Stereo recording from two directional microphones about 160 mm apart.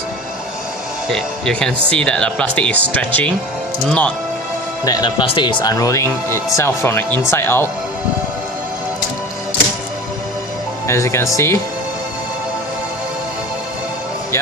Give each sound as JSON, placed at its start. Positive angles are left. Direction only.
{"t": 1.1, "sound": "speech", "side_deg": 5}
{"t": 4.9, "sound": "speech", "side_deg": 25}
{"t": 10.8, "sound": "speech", "side_deg": 20}